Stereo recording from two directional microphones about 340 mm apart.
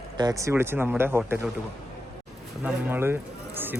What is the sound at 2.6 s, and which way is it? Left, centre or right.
Speech, centre.